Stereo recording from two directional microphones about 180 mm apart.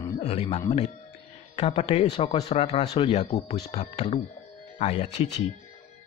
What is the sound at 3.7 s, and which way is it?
Speech, 35° left (ahead or behind).